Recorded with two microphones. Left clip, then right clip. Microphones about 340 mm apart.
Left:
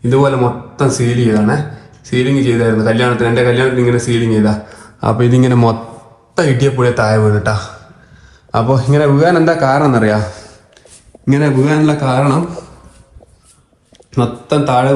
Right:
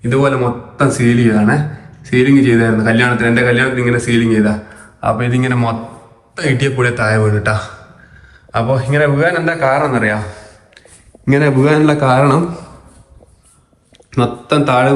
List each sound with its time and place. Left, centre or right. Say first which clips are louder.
0.1 s speech: left 2 dB; centre
11.3 s a man's voice: right 1 dB; centre
14.1 s speech: right 1 dB; centre